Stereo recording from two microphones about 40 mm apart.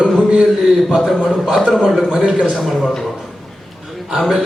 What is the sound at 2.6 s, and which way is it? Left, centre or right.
Speech, centre.